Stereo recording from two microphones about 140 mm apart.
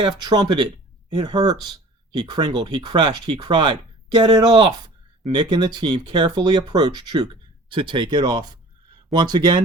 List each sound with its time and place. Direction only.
0.0 s speech: 30° right (ahead or behind)